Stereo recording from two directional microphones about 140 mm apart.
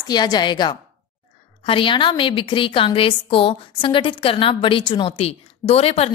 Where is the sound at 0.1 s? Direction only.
30° left (ahead or behind).